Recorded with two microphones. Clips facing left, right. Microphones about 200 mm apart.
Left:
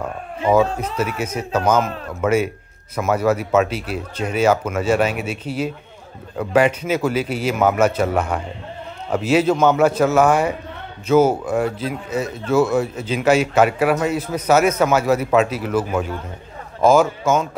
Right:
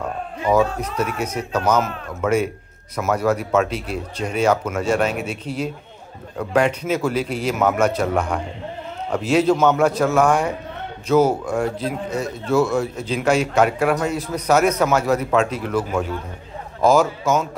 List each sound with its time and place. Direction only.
0.6 s speech: 5° left (ahead or behind)